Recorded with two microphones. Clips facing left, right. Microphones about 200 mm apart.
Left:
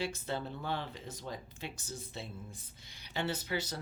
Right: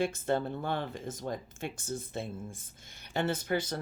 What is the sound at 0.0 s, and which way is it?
Speech, 50° right (ahead or behind).